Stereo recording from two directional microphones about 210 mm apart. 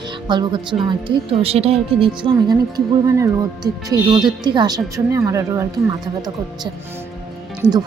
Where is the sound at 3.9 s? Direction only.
20° right (ahead or behind).